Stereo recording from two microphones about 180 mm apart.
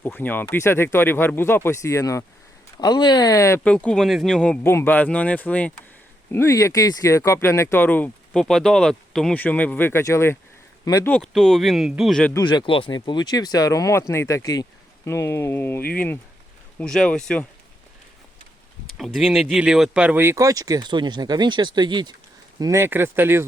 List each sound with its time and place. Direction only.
0.0 s speech: 10° left (ahead or behind)
11.1 s speech: 5° left (ahead or behind)
12.3 s speech: 25° left (ahead or behind); by 17.4 s 5° left (ahead or behind)
18.9 s speech: centre (ahead or behind)